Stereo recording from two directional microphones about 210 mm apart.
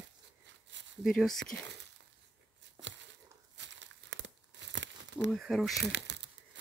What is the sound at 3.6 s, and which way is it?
Crumpling, 60° right (ahead or behind).